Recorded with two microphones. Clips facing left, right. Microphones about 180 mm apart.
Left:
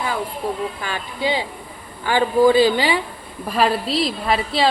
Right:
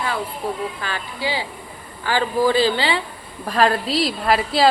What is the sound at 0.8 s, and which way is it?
A woman's voice, 15° left (ahead or behind).